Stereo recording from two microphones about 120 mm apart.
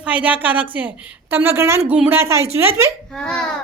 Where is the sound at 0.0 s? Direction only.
10° right (ahead or behind).